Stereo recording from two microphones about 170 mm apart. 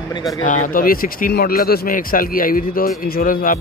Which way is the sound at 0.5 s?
50° left (ahead or behind).